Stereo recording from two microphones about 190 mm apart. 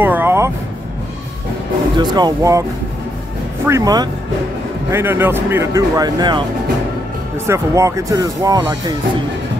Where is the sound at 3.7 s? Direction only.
20° right (ahead or behind).